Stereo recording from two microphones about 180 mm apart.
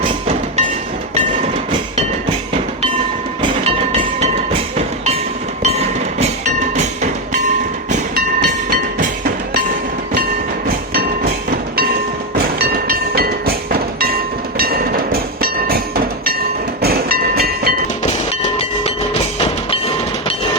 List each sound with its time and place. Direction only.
3.4 s train: 35° right (ahead or behind)
5.6 s music: 35° right (ahead or behind)
12.7 s train: 55° right (ahead or behind)